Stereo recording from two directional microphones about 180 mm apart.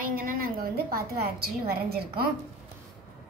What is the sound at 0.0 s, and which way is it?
A woman's voice, 50° right (ahead or behind).